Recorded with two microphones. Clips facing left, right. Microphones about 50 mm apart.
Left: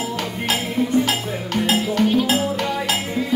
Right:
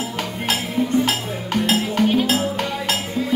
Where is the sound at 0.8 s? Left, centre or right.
Centre.